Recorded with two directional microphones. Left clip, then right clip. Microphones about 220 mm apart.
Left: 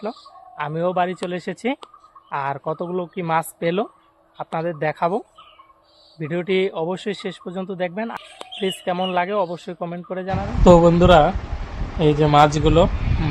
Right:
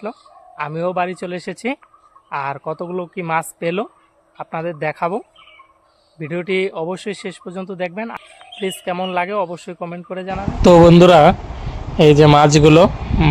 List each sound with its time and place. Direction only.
0.0 s speech: 5° right (ahead or behind)
10.6 s speech: 50° right (ahead or behind)